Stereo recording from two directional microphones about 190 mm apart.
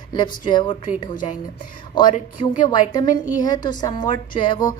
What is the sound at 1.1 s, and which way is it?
Speech, 45° left (ahead or behind).